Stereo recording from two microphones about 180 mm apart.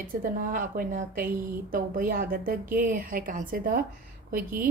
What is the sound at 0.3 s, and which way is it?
A woman's voice, 50° right (ahead or behind).